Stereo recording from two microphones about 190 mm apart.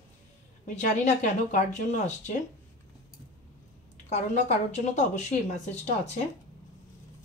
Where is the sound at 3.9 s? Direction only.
40° left (ahead or behind).